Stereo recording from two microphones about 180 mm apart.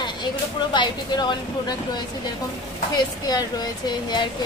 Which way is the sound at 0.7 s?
25° left (ahead or behind).